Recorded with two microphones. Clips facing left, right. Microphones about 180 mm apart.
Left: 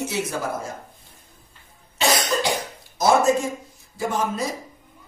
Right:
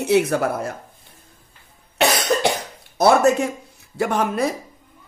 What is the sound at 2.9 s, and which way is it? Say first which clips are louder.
A man's voice: right 3 dB; 65° right (ahead or behind).